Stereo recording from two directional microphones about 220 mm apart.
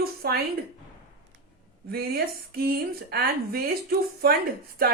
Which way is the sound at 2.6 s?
45° right (ahead or behind).